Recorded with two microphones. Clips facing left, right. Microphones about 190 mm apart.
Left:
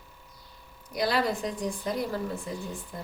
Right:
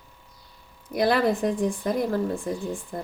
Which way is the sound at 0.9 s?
55° right (ahead or behind).